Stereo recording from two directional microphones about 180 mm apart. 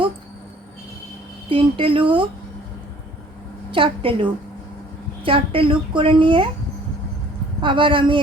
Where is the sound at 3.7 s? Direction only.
30° right (ahead or behind).